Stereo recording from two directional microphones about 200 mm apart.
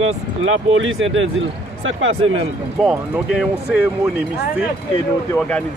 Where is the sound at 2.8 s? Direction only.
5° right (ahead or behind).